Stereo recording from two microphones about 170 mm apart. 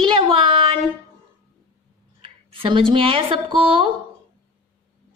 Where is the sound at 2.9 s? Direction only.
30° right (ahead or behind).